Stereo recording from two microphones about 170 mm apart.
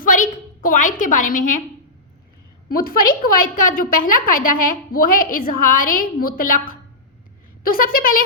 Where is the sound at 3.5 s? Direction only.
55° left (ahead or behind).